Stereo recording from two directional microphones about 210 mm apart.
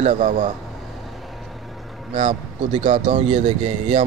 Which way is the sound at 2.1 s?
35° right (ahead or behind).